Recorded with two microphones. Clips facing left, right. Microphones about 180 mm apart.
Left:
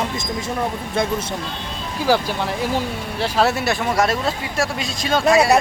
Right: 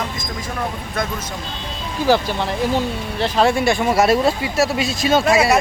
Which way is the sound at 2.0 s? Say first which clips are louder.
Right 2 dB; 10° left (ahead or behind).